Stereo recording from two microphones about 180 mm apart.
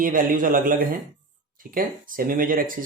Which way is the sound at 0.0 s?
50° right (ahead or behind).